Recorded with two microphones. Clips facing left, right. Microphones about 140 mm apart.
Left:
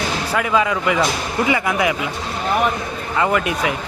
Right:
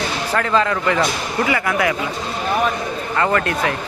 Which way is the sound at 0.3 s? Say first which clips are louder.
Even; 10° left (ahead or behind).